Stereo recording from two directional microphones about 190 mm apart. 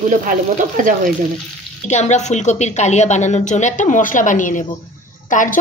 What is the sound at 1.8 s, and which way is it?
A woman's voice, 35° left (ahead or behind).